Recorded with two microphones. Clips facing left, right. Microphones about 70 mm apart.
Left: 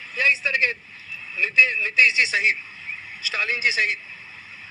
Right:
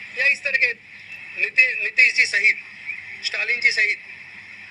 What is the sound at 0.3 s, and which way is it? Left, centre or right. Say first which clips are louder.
A man's voice: even; right.